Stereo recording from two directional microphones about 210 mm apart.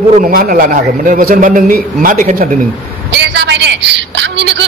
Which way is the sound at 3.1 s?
55° right (ahead or behind).